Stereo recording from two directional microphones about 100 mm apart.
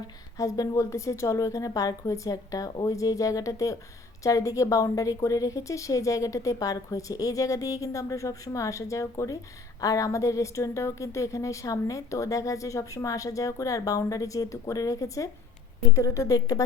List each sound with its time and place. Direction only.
0.3 s a woman's voice: 35° left (ahead or behind)